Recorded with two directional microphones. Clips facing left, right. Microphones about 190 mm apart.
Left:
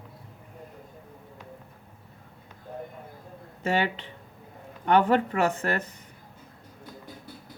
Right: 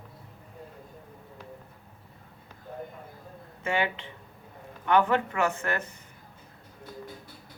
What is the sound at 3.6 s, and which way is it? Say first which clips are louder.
Speech: left 2 dB; 35° left (ahead or behind).